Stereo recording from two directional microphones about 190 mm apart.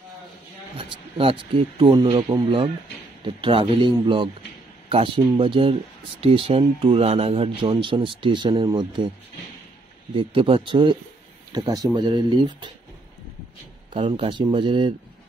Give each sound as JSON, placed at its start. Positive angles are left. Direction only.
{"t": 0.7, "sound": "a man's voice", "side_deg": -25}
{"t": 10.1, "sound": "speech", "side_deg": -30}
{"t": 13.9, "sound": "speech", "side_deg": -30}